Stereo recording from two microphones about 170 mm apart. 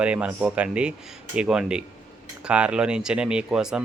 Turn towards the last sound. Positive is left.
turn(degrees=-5)  # may be behind; listen again after turning